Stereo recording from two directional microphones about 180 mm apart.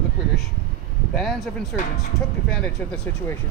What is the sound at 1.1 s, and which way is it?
Speech, centre (ahead or behind).